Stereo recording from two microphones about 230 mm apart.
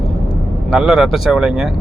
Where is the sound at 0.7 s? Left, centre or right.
Centre.